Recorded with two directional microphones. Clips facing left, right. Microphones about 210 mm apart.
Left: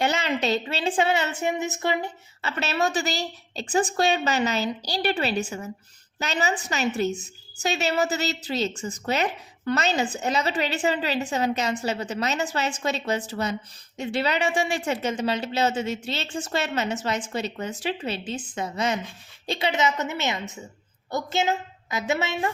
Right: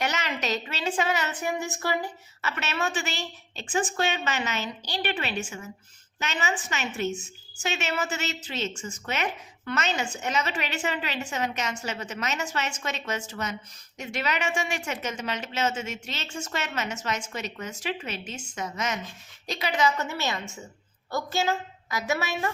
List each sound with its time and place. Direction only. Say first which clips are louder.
0.0 s a woman's voice: left 5 dB; 30° left (ahead or behind)